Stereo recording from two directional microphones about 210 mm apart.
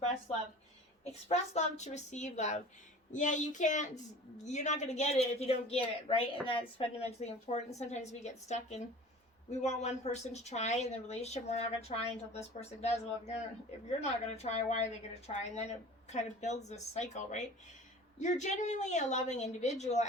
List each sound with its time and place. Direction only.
1.3 s a woman's voice: 35° left (ahead or behind)